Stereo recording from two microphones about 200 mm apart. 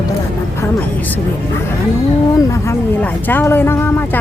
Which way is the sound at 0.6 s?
10° left (ahead or behind).